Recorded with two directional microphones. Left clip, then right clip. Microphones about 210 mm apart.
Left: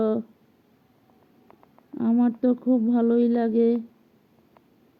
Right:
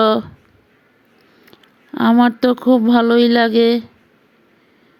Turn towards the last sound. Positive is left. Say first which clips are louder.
# right 9 dB
turn(degrees=-35)  # may be behind; listen again after turning